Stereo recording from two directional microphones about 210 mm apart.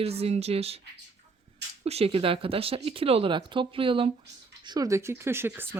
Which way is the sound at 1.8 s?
30° right (ahead or behind).